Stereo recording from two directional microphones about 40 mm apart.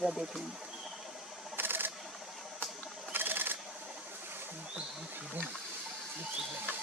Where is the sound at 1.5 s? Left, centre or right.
Right.